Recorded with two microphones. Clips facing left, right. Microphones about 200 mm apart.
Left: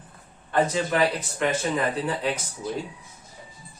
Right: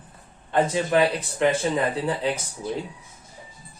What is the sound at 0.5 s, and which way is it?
Speech, 15° right (ahead or behind).